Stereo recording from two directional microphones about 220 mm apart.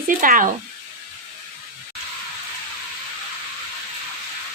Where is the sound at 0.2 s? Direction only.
35° right (ahead or behind).